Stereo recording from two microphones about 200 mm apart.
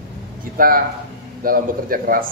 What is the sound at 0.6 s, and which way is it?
A man's voice, 45° right (ahead or behind).